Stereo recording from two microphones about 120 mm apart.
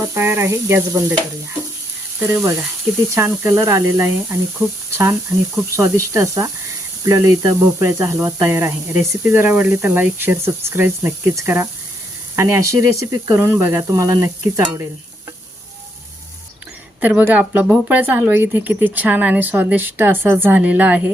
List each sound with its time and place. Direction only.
0.1 s speech: 20° right (ahead or behind)
2.1 s speech: 15° right (ahead or behind)
4.9 s sizzle: 25° right (ahead or behind)
5.7 s speech: 25° right (ahead or behind)
17.0 s a woman's voice: 15° right (ahead or behind)